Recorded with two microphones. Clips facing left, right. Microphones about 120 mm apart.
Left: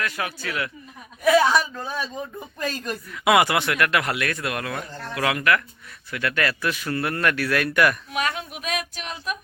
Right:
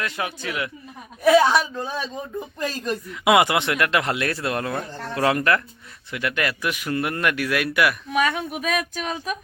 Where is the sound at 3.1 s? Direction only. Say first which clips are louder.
Right 1 dB; 20° right (ahead or behind).